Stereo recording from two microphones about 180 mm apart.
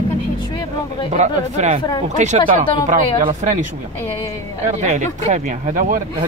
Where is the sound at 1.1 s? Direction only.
40° right (ahead or behind).